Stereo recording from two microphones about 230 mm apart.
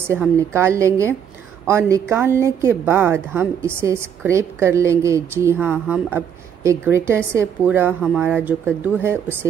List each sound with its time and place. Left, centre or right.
0.0 s a woman's voice: centre